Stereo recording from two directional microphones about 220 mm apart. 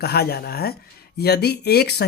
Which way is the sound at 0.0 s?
45° left (ahead or behind).